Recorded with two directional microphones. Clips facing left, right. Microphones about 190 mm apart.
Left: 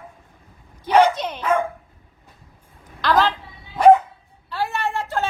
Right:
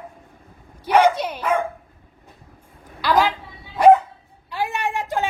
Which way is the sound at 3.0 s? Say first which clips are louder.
Even; 10° right (ahead or behind).